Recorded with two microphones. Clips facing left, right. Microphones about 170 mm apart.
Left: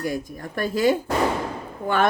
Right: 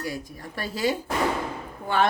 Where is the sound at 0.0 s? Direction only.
50° left (ahead or behind).